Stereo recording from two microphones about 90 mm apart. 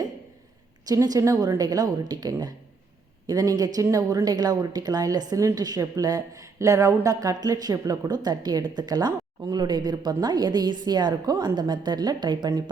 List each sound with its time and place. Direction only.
0.9 s a woman's voice: 45° right (ahead or behind)